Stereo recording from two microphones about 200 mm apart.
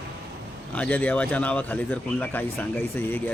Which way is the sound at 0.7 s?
5° left (ahead or behind).